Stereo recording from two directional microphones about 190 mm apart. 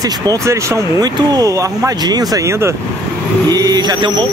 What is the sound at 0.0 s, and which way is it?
Speech, 20° right (ahead or behind).